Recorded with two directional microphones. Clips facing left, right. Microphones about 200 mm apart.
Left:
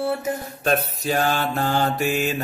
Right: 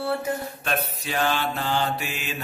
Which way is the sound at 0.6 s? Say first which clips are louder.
Left 10 dB; 40° left (ahead or behind).